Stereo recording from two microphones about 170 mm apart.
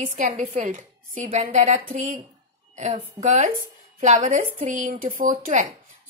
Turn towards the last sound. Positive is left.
turn(degrees=-50)  # may be behind; listen again after turning